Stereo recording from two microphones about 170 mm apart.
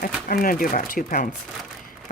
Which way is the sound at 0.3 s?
55° left (ahead or behind).